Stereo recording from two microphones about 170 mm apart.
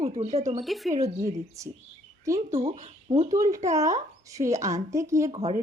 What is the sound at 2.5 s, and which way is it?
Speech, 40° right (ahead or behind).